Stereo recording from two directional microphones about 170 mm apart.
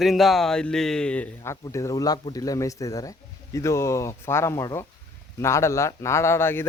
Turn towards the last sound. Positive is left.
turn(degrees=15)  # may be behind; listen again after turning